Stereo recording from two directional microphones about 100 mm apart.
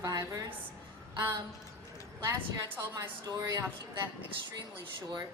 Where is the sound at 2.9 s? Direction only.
35° right (ahead or behind).